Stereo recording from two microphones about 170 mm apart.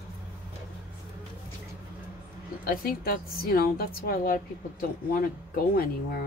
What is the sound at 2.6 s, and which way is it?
A woman's voice, 60° left (ahead or behind).